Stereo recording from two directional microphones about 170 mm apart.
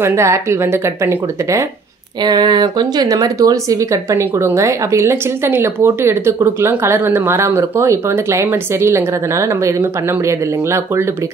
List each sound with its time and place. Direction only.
0.0 s speech: 15° right (ahead or behind)
2.2 s speech: 25° right (ahead or behind)